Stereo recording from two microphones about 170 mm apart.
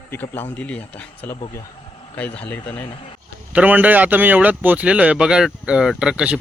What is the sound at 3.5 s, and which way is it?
A man's voice, 10° right (ahead or behind).